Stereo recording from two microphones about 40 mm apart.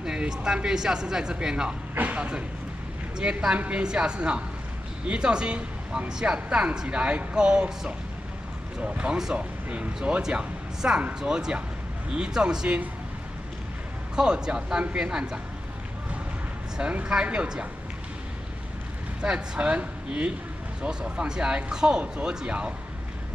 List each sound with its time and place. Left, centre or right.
0.0 s speech: centre
2.0 s speech: right
3.2 s speech: right
10.1 s speech: centre
10.8 s speech: right
11.1 s speech: centre
14.1 s speech: centre
16.8 s speech: right
19.2 s speech: right